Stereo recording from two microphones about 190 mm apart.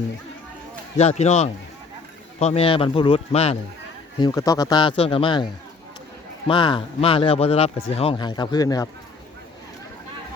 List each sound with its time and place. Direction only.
0.9 s a man's voice: 35° left (ahead or behind)
4.2 s speech: 20° left (ahead or behind)
6.5 s speech: 25° left (ahead or behind)